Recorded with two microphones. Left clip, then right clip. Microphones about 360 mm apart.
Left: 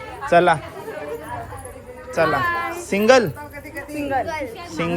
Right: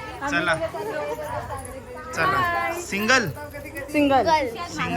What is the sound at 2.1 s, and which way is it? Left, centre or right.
Speech, centre.